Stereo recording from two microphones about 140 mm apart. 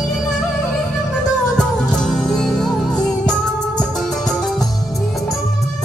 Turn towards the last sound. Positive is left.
turn(degrees=0)  # may be behind; listen again after turning